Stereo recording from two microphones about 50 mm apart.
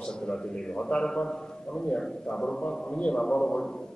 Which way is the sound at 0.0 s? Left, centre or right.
Centre.